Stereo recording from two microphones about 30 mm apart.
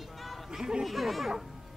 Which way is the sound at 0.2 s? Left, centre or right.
Centre.